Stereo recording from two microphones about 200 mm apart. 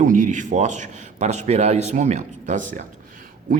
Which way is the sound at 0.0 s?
40° right (ahead or behind).